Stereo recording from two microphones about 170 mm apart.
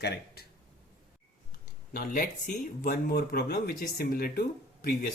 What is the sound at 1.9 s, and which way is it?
Speech, 55° left (ahead or behind).